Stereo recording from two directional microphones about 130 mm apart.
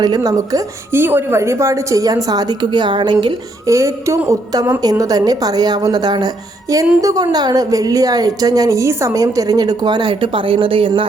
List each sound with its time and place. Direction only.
0.0 s a woman's voice: 30° right (ahead or behind)
3.7 s a woman's voice: 25° right (ahead or behind); by 11.0 s 45° right (ahead or behind)